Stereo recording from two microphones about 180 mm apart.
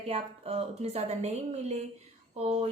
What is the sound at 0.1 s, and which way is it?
A woman's voice, 35° right (ahead or behind).